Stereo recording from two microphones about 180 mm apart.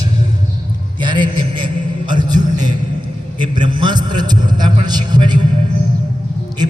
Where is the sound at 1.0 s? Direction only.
25° right (ahead or behind).